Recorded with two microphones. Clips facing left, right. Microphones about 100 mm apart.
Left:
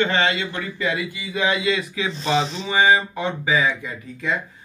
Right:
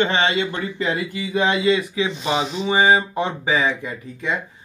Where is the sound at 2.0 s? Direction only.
15° right (ahead or behind).